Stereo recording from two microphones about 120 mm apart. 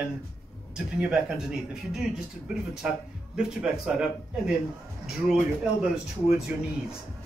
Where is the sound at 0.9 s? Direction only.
10° right (ahead or behind).